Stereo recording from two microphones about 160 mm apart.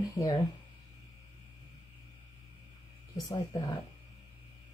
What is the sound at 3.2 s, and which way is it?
Speech, 25° left (ahead or behind).